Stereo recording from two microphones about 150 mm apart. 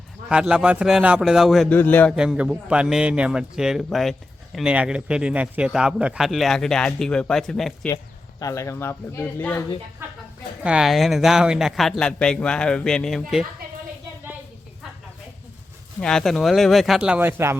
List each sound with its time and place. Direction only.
0.3 s a man's voice: 5° right (ahead or behind)
1.7 s speech: 10° left (ahead or behind)
2.1 s a man's voice: 5° right (ahead or behind)
8.4 s speech: 20° left (ahead or behind)
10.0 s a man's voice: 15° right (ahead or behind); by 13.4 s 5° left (ahead or behind)
16.0 s a man's voice: 5° left (ahead or behind); by 17.6 s 15° right (ahead or behind)